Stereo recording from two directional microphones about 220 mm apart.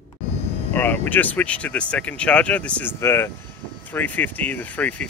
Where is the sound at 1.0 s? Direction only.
5° left (ahead or behind).